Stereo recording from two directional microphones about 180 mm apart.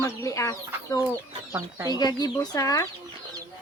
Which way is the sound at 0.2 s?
15° left (ahead or behind).